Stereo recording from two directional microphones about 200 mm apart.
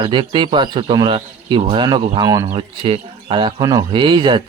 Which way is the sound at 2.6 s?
25° right (ahead or behind).